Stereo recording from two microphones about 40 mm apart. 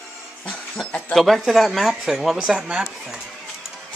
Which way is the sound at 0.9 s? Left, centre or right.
Left.